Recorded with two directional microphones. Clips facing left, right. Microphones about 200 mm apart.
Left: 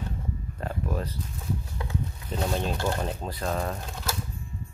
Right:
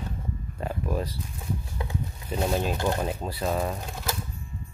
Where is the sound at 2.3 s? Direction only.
10° right (ahead or behind).